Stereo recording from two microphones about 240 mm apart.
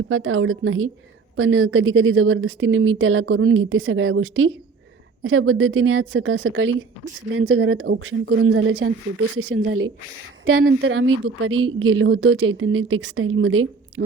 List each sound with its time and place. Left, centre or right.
0.1 s a woman's voice: right